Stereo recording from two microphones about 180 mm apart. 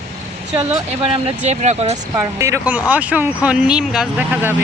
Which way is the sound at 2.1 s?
15° right (ahead or behind).